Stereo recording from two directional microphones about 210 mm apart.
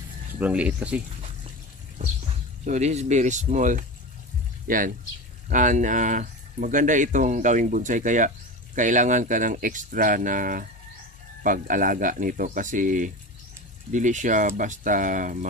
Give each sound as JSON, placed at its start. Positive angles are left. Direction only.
{"t": 0.4, "sound": "speech", "side_deg": -5}
{"t": 2.6, "sound": "speech", "side_deg": -35}